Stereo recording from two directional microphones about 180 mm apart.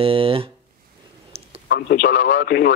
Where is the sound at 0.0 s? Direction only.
30° right (ahead or behind).